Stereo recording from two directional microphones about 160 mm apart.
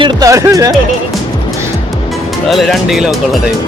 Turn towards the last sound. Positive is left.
turn(degrees=0)  # may be behind; listen again after turning